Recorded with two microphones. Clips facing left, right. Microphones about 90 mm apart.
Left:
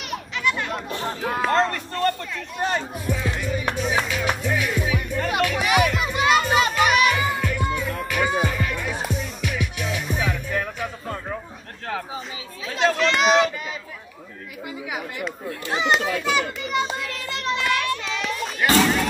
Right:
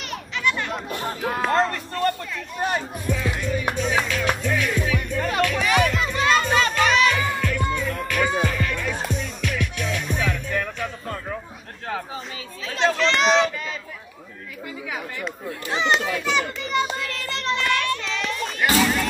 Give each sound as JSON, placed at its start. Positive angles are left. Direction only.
{"t": 0.1, "sound": "chatter", "side_deg": 5}
{"t": 1.3, "sound": "speech", "side_deg": 0}
{"t": 3.3, "sound": "speech", "side_deg": 5}
{"t": 3.7, "sound": "music", "side_deg": 5}
{"t": 12.6, "sound": "speech", "side_deg": 5}
{"t": 15.2, "sound": "speech", "side_deg": 5}
{"t": 16.6, "sound": "child singing", "side_deg": 5}